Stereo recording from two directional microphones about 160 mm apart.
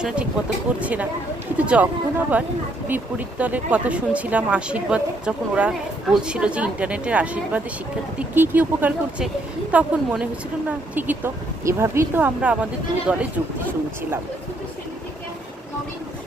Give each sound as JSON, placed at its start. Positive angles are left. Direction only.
{"t": 0.8, "sound": "speech", "side_deg": -10}